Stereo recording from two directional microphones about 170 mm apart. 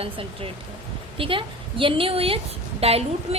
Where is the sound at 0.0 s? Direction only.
35° right (ahead or behind).